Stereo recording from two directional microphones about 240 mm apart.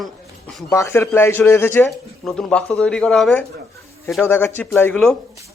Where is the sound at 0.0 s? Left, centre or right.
Centre.